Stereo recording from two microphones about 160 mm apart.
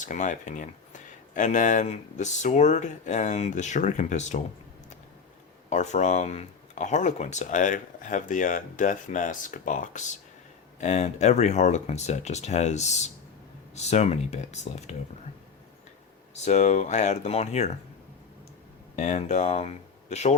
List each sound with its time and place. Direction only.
0.0 s speech: 50° left (ahead or behind)
5.6 s speech: 50° left (ahead or behind)
16.4 s speech: 45° left (ahead or behind)
18.9 s speech: 45° left (ahead or behind)